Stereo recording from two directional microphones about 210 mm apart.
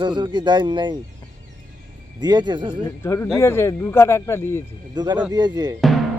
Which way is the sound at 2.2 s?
20° right (ahead or behind).